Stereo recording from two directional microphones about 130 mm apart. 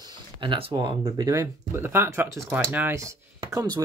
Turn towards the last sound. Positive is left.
turn(degrees=-25)  # may be behind; listen again after turning